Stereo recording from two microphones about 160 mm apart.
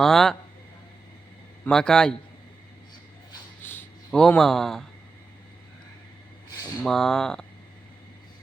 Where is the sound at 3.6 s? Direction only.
15° left (ahead or behind).